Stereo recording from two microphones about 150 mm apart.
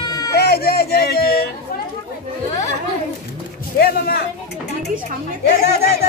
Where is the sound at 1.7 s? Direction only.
90° left.